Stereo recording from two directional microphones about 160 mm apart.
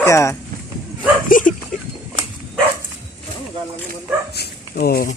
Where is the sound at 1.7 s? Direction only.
55° left (ahead or behind).